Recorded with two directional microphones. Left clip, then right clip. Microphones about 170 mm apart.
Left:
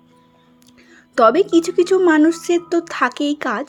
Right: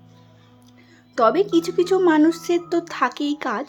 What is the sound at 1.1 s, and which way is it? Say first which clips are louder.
Speech: left 5 dB; 20° left (ahead or behind).